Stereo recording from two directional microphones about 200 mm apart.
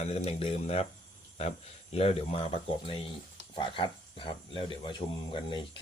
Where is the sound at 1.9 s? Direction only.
30° left (ahead or behind).